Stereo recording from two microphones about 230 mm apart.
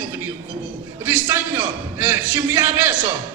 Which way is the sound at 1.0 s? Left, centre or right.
Centre.